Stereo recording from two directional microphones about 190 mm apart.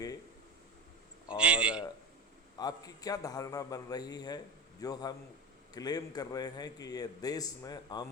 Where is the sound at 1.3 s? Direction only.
5° right (ahead or behind).